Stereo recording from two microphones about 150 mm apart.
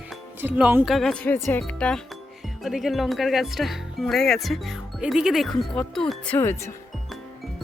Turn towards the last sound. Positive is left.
turn(degrees=15)  # may be behind; listen again after turning